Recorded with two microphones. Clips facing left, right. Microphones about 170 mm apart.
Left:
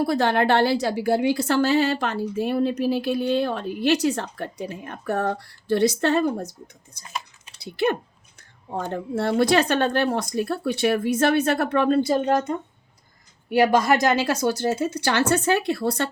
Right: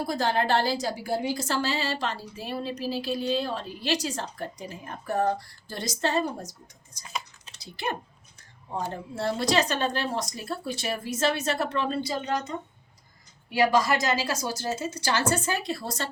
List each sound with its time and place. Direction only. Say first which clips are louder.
0.0 s a woman's voice: left 6 dB; 65° left (ahead or behind)